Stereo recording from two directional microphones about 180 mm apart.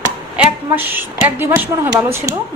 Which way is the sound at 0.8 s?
10° right (ahead or behind).